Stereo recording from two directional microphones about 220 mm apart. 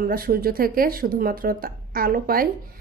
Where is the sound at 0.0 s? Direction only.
40° right (ahead or behind).